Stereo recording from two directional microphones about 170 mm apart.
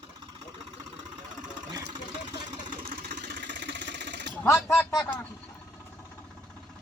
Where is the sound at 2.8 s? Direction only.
60° right (ahead or behind); by 4.3 s 90° right.